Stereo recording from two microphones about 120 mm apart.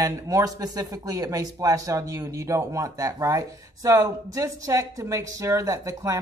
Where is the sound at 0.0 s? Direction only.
25° right (ahead or behind).